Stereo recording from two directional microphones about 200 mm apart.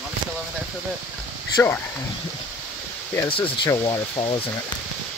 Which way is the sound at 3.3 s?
25° left (ahead or behind).